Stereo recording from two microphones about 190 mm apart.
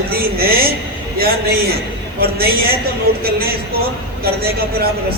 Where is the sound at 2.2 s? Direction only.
55° right (ahead or behind).